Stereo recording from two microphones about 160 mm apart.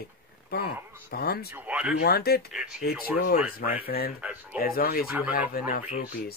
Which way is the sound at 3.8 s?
70° left (ahead or behind).